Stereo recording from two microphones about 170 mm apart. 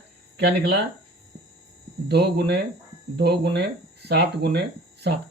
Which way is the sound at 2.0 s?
75° right (ahead or behind).